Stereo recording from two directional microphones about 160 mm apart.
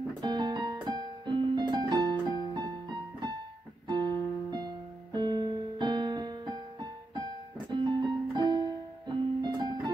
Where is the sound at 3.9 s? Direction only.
25° right (ahead or behind).